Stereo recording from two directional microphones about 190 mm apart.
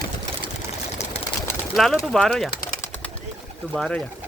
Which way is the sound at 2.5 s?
50° left (ahead or behind).